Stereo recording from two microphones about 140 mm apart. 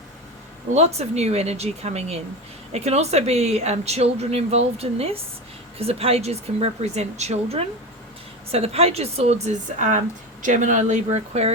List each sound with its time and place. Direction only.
0.7 s speech: 50° right (ahead or behind)